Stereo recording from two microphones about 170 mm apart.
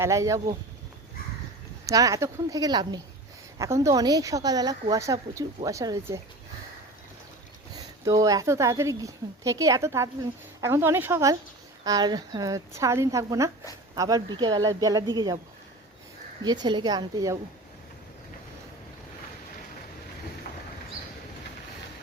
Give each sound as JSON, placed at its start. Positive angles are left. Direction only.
{"t": 0.0, "sound": "a woman's voice", "side_deg": -15}
{"t": 1.9, "sound": "a woman's voice", "side_deg": -20}
{"t": 8.0, "sound": "a woman's voice", "side_deg": -20}
{"t": 16.4, "sound": "a woman's voice", "side_deg": -25}